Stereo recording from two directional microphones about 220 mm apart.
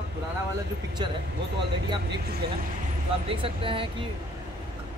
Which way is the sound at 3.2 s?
25° right (ahead or behind).